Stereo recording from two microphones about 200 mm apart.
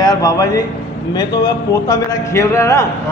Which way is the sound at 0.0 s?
20° left (ahead or behind).